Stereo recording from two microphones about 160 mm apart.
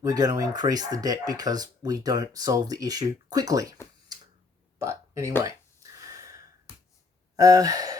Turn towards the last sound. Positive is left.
turn(degrees=-20)  # may be behind; listen again after turning